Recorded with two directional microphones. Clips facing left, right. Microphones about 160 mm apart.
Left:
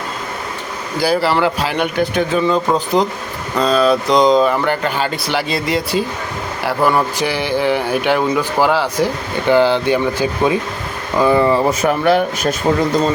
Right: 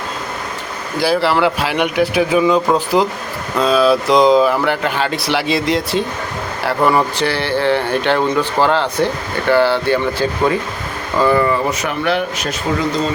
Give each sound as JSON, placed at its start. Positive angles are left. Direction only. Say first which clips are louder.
{"t": 0.9, "sound": "speech", "louder": "even", "side_deg": 0}
{"t": 7.2, "sound": "speech", "louder": "even", "side_deg": 10}
{"t": 11.8, "sound": "speech", "louder": "left 4 dB", "side_deg": 40}